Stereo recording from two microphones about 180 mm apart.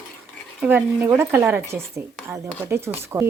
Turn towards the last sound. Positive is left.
turn(degrees=-15)  # may be behind; listen again after turning